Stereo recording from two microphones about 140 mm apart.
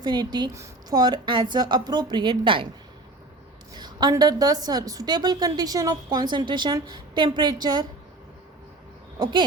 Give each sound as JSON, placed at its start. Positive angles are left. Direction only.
{"t": 0.0, "sound": "a woman's voice", "side_deg": -30}
{"t": 3.8, "sound": "a woman's voice", "side_deg": -30}
{"t": 9.1, "sound": "speech", "side_deg": -30}